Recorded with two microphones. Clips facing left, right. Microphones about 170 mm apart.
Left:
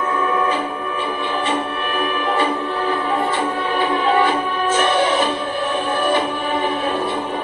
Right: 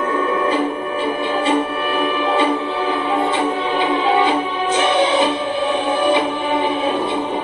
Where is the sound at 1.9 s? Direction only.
25° right (ahead or behind).